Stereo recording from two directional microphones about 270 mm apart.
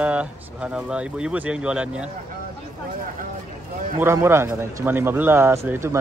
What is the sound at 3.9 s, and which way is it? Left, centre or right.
Speech, centre.